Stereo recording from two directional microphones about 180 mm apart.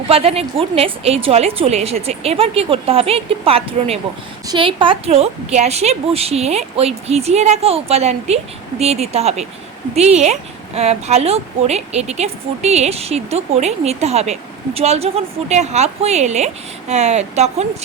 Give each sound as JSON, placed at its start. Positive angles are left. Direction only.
{"t": 0.1, "sound": "speech", "side_deg": -35}